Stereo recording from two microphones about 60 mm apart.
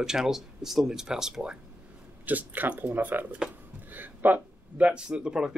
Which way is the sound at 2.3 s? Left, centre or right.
Right.